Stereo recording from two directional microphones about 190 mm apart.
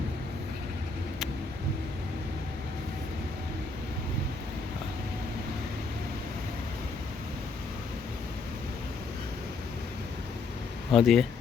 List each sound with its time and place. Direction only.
10.9 s speech: centre (ahead or behind)